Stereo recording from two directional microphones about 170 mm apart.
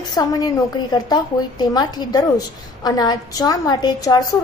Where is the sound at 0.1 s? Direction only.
20° left (ahead or behind).